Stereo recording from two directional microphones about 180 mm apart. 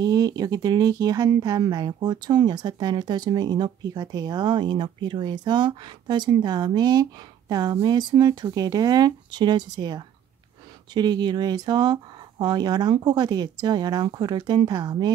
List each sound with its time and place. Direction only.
0.0 s speech: 20° right (ahead or behind)